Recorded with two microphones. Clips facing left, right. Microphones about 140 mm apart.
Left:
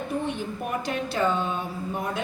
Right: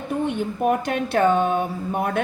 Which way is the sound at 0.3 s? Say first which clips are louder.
Right 9 dB; 55° right (ahead or behind).